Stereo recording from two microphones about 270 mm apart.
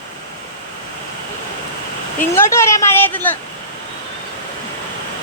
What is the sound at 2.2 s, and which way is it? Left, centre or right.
Speech, centre.